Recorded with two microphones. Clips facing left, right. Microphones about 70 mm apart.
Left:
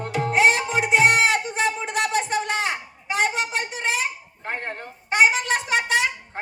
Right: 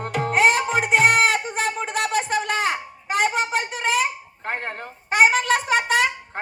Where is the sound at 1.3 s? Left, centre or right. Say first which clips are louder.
Left 1 dB; right.